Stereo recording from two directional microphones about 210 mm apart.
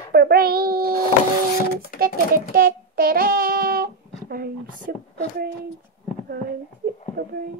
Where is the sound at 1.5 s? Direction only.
45° left (ahead or behind).